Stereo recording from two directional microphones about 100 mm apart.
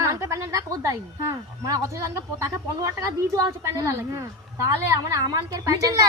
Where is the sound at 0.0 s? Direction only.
30° right (ahead or behind).